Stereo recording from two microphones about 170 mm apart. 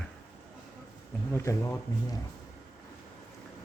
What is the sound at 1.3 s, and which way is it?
Speech, 15° left (ahead or behind).